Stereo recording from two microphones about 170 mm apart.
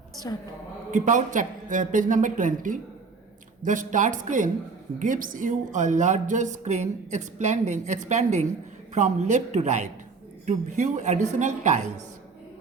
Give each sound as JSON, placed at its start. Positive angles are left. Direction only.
{"t": 0.9, "sound": "a woman's voice", "side_deg": -50}